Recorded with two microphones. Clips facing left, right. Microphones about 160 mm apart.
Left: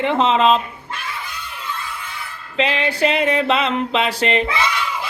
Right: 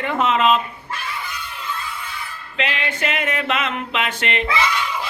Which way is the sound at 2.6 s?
35° left (ahead or behind).